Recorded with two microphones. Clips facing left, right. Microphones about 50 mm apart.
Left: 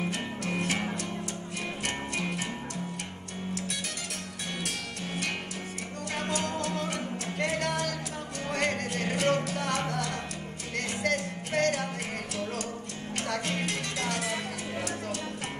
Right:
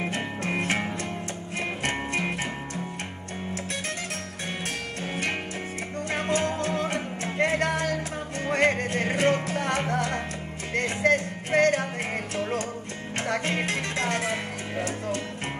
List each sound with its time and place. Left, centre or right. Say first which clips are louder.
0.0 s music: right 3 dB; right
1.9 s music: right 5 dB; right
6.1 s music: right 5 dB; right